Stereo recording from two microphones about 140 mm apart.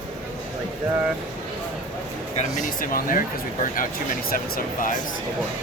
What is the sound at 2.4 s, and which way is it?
Speech, 65° left (ahead or behind).